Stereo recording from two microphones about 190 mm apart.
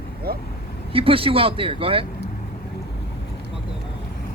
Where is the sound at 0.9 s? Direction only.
30° right (ahead or behind).